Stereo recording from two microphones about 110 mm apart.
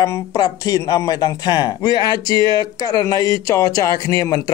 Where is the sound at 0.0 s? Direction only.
30° left (ahead or behind).